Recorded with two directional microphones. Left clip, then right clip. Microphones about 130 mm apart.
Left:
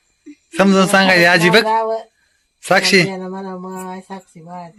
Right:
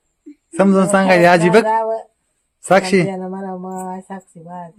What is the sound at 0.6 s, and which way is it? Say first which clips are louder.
A man's voice: left 1 dB; 20° right (ahead or behind).